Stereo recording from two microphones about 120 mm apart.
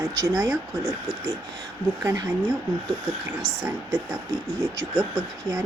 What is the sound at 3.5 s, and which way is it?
Speech, 30° right (ahead or behind).